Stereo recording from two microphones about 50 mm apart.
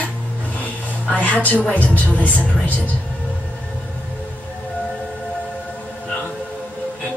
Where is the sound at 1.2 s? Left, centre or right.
Left.